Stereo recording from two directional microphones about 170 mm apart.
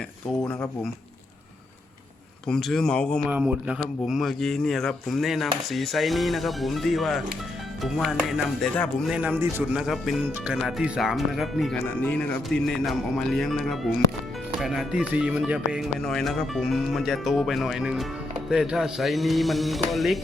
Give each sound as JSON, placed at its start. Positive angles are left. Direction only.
{"t": 2.5, "sound": "speech", "side_deg": 0}
{"t": 3.2, "sound": "speech", "side_deg": -10}